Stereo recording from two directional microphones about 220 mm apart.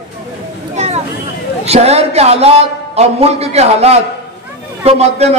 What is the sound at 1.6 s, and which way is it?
A man's voice, 30° right (ahead or behind).